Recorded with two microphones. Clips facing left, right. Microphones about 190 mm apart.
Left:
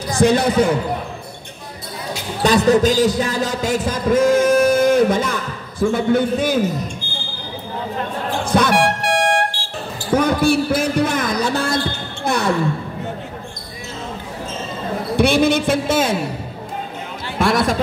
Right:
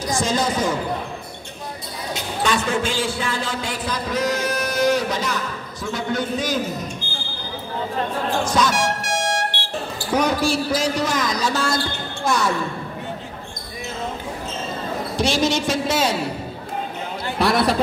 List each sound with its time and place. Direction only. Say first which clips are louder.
0.2 s speech: left 9 dB; 60° left (ahead or behind)
2.4 s a man's voice: left 9 dB; 40° left (ahead or behind); by 6.6 s 55° left (ahead or behind)
8.5 s music: left 8 dB; 60° left (ahead or behind)
10.1 s a sound: left 4 dB; 55° left (ahead or behind)
15.1 s a woman's voice: left 6 dB; 60° left (ahead or behind)
17.4 s speech: left 1 dB; 45° left (ahead or behind)